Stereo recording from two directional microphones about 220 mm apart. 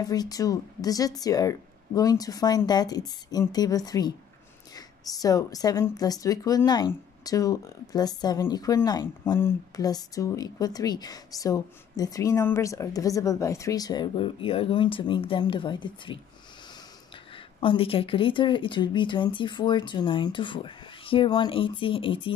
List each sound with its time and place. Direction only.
0.0 s a woman's voice: 15° left (ahead or behind)
17.6 s speech: 25° left (ahead or behind)